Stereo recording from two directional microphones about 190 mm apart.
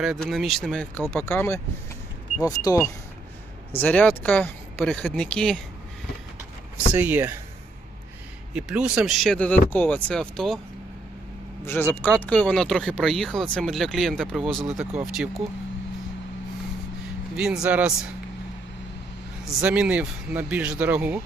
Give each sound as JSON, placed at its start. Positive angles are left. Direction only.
{"t": 0.0, "sound": "speech", "side_deg": 0}
{"t": 6.9, "sound": "speech", "side_deg": -10}
{"t": 8.5, "sound": "speech", "side_deg": -5}
{"t": 11.6, "sound": "speech", "side_deg": 10}
{"t": 17.3, "sound": "speech", "side_deg": -5}
{"t": 19.6, "sound": "speech", "side_deg": -5}